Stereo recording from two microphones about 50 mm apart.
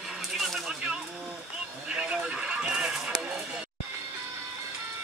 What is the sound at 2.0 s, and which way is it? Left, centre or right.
Music, right.